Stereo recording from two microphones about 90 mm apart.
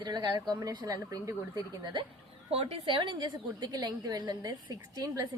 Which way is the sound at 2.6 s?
65° right (ahead or behind).